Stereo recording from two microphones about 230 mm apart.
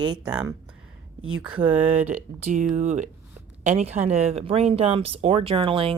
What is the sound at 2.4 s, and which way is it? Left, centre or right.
Speech, right.